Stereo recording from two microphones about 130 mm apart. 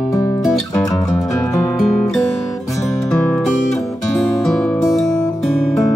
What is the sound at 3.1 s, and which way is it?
Music, 5° left (ahead or behind).